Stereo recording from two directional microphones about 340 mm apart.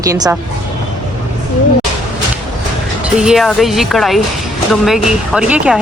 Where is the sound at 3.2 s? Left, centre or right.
Centre.